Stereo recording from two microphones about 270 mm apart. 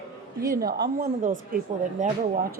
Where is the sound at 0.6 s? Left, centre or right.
Right.